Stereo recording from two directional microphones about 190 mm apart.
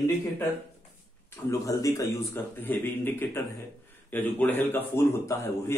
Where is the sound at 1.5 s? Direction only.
15° left (ahead or behind).